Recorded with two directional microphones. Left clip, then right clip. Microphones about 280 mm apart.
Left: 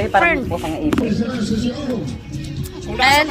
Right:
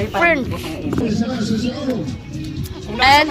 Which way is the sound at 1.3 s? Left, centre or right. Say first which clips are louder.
Even; left.